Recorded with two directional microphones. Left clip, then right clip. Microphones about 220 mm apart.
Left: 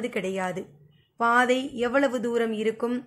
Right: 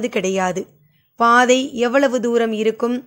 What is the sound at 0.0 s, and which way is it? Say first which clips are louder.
A woman's voice: right 9 dB; 40° right (ahead or behind).